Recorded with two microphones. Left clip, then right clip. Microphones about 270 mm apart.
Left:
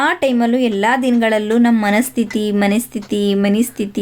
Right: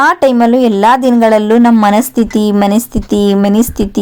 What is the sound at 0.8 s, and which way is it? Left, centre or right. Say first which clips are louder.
Speech: right 8 dB; centre.